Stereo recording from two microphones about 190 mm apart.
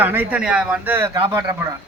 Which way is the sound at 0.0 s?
10° right (ahead or behind).